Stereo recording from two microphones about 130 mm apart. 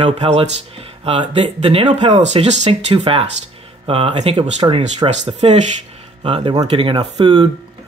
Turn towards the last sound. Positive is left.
turn(degrees=-50)  # may be behind; listen again after turning